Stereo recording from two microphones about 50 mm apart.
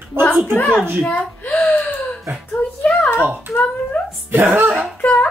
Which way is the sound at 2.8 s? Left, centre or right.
Left.